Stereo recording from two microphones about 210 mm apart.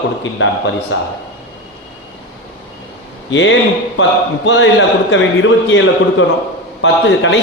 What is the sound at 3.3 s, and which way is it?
Speech, 65° left (ahead or behind).